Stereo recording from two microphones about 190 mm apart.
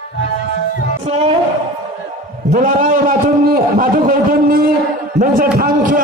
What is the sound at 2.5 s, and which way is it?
A man's voice, 40° right (ahead or behind).